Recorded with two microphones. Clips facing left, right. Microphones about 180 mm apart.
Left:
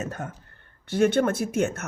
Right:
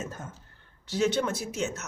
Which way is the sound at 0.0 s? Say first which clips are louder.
Left 5 dB; 65° left (ahead or behind).